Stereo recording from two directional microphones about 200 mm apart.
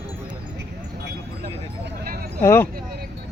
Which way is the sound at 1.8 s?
50° right (ahead or behind).